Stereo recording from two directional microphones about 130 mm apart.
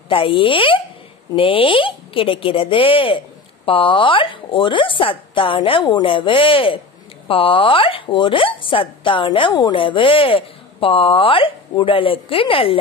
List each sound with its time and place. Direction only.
0.1 s a woman's voice: 40° left (ahead or behind)
9.5 s a woman's voice: 30° left (ahead or behind)
9.8 s speech: 40° left (ahead or behind)